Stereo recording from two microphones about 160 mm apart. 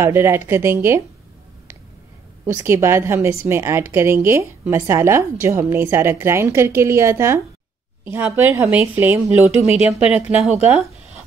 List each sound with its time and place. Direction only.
0.0 s a woman's voice: 15° right (ahead or behind)
2.4 s a woman's voice: 15° right (ahead or behind); by 10.9 s centre (ahead or behind)